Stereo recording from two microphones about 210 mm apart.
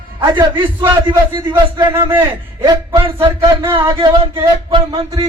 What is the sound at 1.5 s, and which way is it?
Speech, 10° right (ahead or behind).